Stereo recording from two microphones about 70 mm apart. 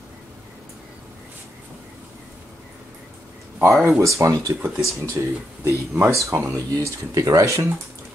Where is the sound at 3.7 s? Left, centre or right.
Right.